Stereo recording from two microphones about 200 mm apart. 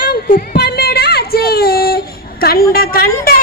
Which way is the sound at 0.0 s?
45° left (ahead or behind).